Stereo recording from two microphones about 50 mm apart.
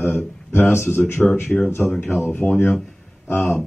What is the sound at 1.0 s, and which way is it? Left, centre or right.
Speech, centre.